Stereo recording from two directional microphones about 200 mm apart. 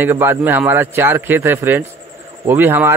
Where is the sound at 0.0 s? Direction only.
10° right (ahead or behind).